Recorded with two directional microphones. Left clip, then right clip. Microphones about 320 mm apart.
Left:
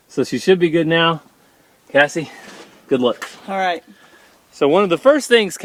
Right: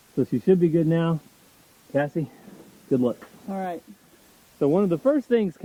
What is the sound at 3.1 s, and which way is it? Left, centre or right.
Speech, centre.